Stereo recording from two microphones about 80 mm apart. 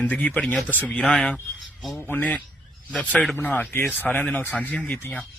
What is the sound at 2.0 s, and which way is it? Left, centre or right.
Speech, left.